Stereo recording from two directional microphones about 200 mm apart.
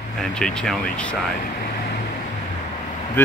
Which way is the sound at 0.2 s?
5° left (ahead or behind).